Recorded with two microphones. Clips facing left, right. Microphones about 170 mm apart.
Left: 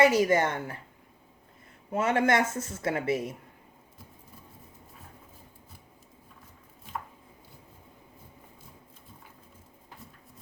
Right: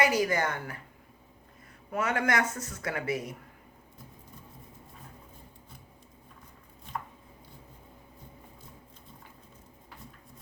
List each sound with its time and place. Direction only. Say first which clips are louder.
0.0 s speech: left 5 dB; 25° left (ahead or behind)
1.9 s speech: left 4 dB; 25° left (ahead or behind)